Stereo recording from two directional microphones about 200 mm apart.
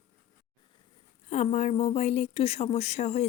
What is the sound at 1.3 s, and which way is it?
Speech, 35° left (ahead or behind).